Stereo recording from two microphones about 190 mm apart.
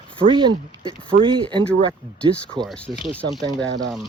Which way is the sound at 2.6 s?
5° left (ahead or behind).